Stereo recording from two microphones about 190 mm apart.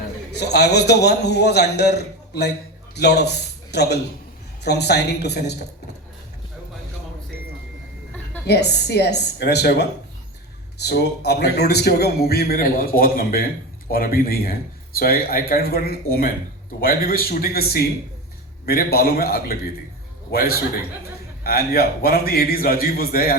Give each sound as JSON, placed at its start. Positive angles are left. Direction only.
{"t": 0.3, "sound": "a man's voice", "side_deg": 60}
{"t": 8.4, "sound": "a man's voice", "side_deg": 60}